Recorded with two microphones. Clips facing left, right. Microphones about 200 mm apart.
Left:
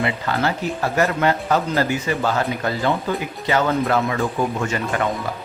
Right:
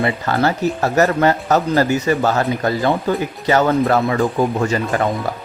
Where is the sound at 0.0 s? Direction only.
40° right (ahead or behind).